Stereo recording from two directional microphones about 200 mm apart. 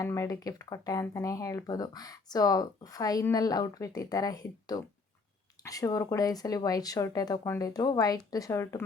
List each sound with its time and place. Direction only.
0.0 s speech: 15° left (ahead or behind)